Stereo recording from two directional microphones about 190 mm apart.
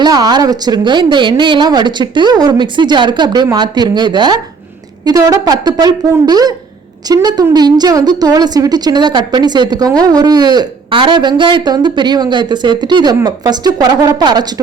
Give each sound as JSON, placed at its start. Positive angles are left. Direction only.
{"t": 0.0, "sound": "speech", "side_deg": -20}